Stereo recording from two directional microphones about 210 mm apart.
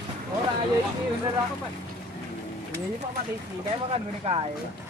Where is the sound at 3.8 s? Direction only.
30° right (ahead or behind).